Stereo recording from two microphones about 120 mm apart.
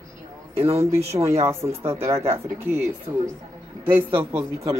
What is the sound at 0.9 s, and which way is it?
A man's voice, 20° right (ahead or behind).